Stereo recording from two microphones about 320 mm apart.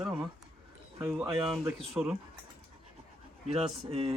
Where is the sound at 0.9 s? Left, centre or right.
Centre.